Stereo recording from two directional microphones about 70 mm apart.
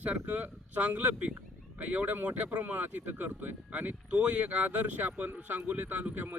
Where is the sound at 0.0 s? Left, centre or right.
Right.